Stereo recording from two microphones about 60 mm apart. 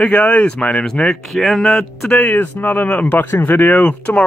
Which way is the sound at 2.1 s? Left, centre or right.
Left.